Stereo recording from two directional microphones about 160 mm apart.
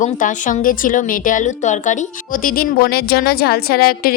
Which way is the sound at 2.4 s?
65° left (ahead or behind).